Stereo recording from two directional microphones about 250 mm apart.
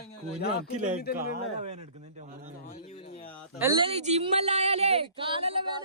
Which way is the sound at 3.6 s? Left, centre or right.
Centre.